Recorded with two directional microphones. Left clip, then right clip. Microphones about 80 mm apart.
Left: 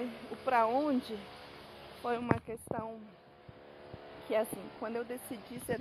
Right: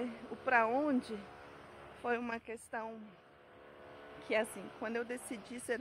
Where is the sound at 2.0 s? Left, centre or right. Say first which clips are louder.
Left 1 dB; right.